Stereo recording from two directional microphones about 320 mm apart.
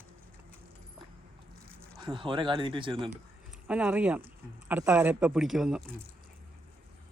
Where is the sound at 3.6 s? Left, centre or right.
Centre.